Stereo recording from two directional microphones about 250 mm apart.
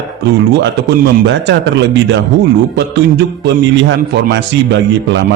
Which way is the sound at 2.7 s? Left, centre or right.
Right.